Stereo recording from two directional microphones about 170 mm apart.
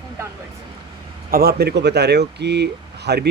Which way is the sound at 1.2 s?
60° right (ahead or behind).